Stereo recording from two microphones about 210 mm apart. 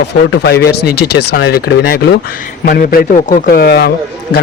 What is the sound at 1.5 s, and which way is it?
A man's voice, 45° left (ahead or behind).